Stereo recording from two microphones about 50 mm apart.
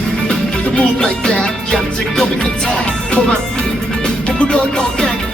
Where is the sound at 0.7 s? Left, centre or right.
Centre.